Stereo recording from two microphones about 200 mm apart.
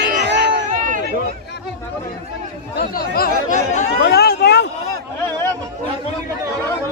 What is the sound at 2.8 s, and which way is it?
Chatter, 50° left (ahead or behind).